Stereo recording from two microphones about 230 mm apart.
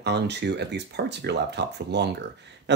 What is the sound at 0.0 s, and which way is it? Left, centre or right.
Speech, right.